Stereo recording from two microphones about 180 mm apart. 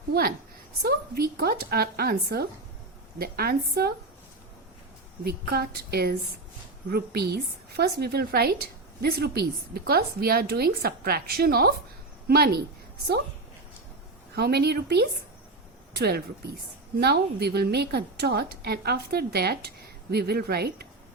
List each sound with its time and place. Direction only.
0.1 s a woman's voice: 55° right (ahead or behind)
5.2 s a woman's voice: 60° right (ahead or behind)
14.3 s a woman's voice: 65° right (ahead or behind)